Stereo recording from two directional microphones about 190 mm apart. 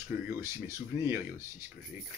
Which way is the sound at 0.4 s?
15° right (ahead or behind).